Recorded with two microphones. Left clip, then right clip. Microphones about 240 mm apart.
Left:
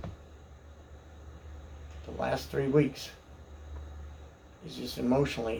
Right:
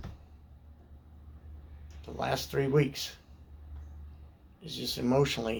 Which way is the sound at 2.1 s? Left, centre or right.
Right.